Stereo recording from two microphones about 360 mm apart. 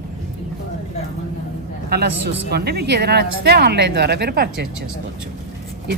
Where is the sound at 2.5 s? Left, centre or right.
Right.